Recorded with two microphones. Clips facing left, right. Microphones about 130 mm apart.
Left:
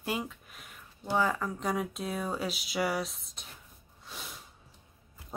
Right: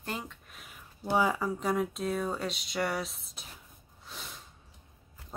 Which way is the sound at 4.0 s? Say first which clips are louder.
Left 1 dB; centre (ahead or behind).